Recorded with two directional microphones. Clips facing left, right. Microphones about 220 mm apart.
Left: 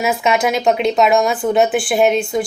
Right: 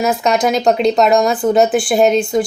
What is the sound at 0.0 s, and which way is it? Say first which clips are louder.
Speech: right 2 dB; 5° left (ahead or behind).